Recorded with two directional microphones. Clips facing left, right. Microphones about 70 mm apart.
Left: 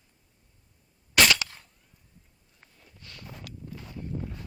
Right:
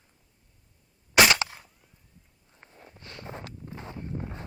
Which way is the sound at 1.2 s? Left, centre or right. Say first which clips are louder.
Right 2 dB; right.